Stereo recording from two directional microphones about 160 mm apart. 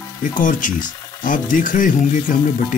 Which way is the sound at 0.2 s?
55° left (ahead or behind).